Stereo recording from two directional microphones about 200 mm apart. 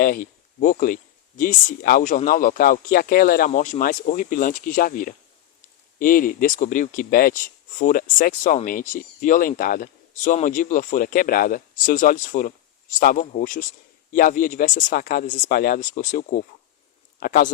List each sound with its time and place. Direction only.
0.0 s speech: 45° left (ahead or behind)